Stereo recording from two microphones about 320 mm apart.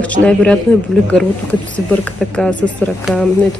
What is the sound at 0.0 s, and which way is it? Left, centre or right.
Speech, centre.